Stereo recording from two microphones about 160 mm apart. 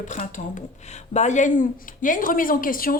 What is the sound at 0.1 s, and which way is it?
A woman's voice, 55° left (ahead or behind).